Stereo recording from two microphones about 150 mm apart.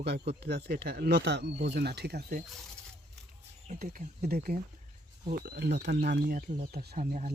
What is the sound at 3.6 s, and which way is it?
Speech, 60° right (ahead or behind).